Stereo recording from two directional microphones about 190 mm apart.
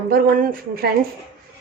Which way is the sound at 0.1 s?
50° right (ahead or behind).